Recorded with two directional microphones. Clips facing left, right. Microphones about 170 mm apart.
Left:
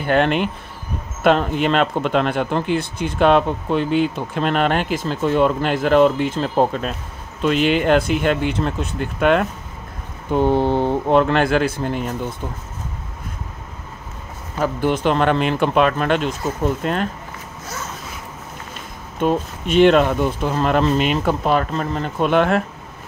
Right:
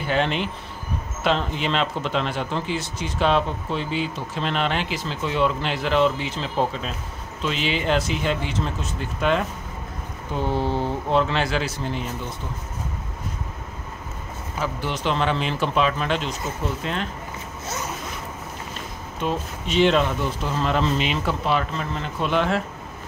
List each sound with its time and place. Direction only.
0.0 s speech: 55° left (ahead or behind)
14.6 s speech: 50° left (ahead or behind)
19.1 s speech: 55° left (ahead or behind)